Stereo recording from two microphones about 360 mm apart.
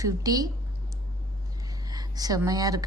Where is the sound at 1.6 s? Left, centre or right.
Centre.